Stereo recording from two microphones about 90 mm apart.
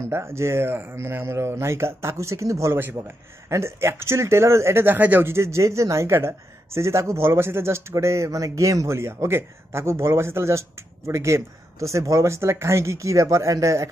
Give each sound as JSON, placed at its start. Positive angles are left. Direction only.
{"t": 0.1, "sound": "speech", "side_deg": -30}